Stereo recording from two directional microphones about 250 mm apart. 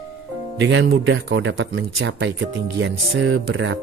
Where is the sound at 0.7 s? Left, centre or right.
Right.